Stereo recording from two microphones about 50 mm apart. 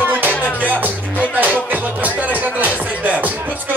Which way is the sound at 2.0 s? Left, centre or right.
Right.